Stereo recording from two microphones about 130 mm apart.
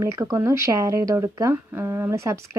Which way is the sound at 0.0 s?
25° right (ahead or behind).